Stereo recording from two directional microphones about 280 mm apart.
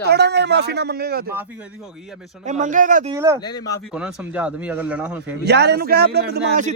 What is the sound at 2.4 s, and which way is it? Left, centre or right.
Speech, right.